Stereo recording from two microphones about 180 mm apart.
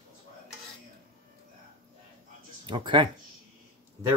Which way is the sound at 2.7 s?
25° right (ahead or behind).